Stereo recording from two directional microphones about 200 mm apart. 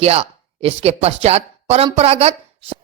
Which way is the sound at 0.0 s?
30° right (ahead or behind).